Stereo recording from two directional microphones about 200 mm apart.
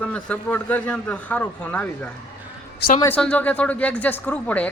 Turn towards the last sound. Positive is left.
turn(degrees=5)  # may be behind; listen again after turning